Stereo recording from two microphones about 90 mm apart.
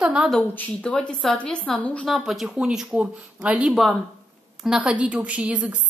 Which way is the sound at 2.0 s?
Centre (ahead or behind).